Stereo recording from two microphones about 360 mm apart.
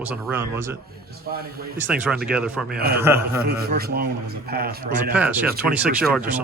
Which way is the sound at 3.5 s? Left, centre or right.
Right.